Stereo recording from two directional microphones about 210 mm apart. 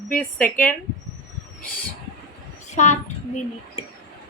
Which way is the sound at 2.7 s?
35° left (ahead or behind).